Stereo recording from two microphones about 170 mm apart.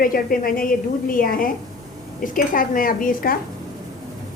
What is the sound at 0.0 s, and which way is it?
A woman's voice, 55° left (ahead or behind).